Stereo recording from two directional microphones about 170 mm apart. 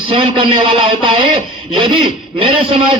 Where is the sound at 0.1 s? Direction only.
30° right (ahead or behind).